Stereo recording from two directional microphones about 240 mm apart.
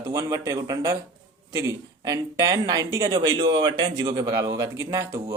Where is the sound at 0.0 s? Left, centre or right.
Centre.